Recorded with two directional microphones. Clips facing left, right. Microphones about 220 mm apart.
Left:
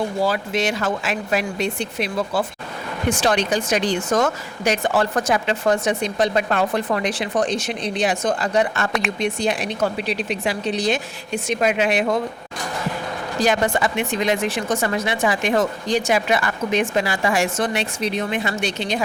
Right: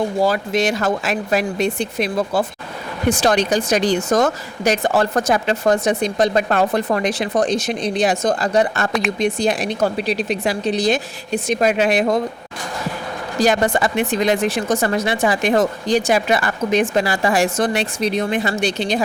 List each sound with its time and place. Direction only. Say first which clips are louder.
0.3 s speech: right 3 dB; 40° right (ahead or behind)
13.4 s speech: right 3 dB; 40° right (ahead or behind)